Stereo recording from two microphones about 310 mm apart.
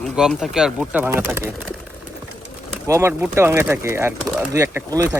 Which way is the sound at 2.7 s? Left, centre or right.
Centre.